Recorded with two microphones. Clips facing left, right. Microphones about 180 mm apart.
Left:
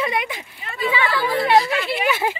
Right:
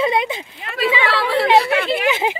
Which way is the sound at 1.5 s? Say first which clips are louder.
Right 2 dB; 65° right (ahead or behind).